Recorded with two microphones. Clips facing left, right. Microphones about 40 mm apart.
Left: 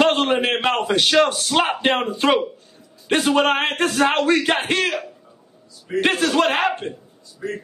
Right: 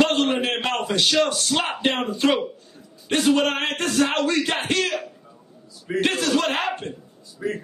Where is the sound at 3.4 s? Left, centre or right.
Left.